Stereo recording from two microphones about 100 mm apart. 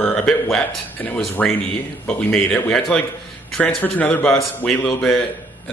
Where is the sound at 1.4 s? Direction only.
10° left (ahead or behind).